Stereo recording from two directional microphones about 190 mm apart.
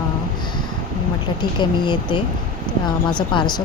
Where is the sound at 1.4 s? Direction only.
25° left (ahead or behind).